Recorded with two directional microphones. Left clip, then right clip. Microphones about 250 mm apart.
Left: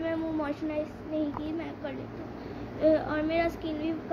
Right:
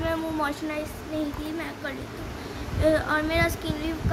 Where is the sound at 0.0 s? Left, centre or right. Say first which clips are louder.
Right 4 dB; centre.